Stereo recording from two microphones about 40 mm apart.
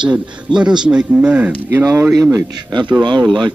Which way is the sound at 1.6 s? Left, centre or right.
Right.